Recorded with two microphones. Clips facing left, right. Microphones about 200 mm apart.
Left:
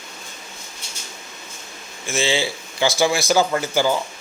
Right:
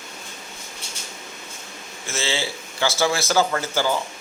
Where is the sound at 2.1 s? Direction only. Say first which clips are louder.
Left 5 dB; 15° left (ahead or behind).